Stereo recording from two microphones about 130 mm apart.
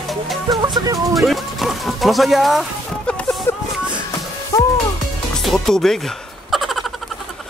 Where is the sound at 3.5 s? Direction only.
15° left (ahead or behind).